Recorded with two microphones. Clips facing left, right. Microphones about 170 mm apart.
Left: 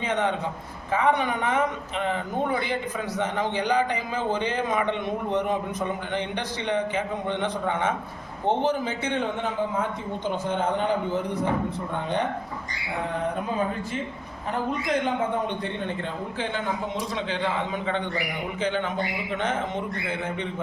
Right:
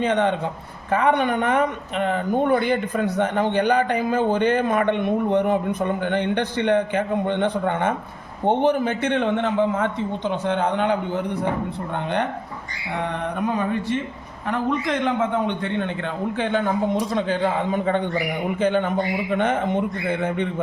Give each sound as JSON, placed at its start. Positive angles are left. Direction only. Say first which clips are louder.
{"t": 0.0, "sound": "a man's voice", "louder": "right 5 dB", "side_deg": -65}
{"t": 13.4, "sound": "music", "louder": "right 4 dB", "side_deg": -80}
{"t": 14.5, "sound": "a man's voice", "louder": "right 3 dB", "side_deg": -85}
{"t": 16.4, "sound": "a man's voice", "louder": "right 7 dB", "side_deg": -55}